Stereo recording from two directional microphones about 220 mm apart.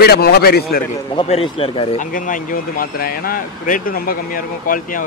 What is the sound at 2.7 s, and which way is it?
Speech, 40° left (ahead or behind).